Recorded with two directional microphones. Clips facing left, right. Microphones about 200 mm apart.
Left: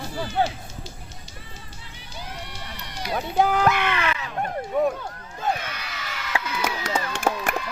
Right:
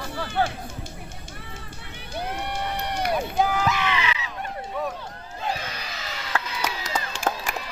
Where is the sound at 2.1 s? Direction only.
60° right (ahead or behind).